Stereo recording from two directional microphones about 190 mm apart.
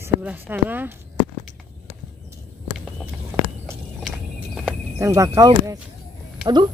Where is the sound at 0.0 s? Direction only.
10° right (ahead or behind).